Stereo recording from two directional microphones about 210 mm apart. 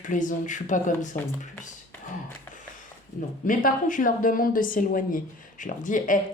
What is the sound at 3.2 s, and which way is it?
A woman's voice, 40° left (ahead or behind).